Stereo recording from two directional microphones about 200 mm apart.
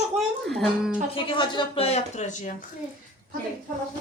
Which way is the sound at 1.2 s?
25° left (ahead or behind).